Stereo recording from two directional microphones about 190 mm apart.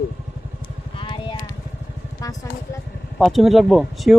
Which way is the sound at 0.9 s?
25° left (ahead or behind).